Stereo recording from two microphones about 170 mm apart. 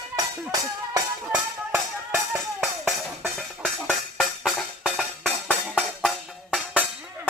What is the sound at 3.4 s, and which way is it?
Music, centre (ahead or behind).